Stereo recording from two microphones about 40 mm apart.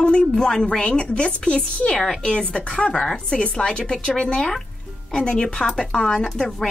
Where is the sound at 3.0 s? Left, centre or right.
Centre.